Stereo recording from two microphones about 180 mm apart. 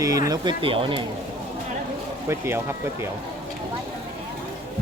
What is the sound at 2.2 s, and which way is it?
Speech, 15° right (ahead or behind).